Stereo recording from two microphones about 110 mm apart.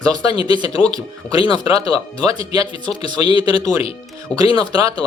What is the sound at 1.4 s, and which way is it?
Speech, 40° right (ahead or behind).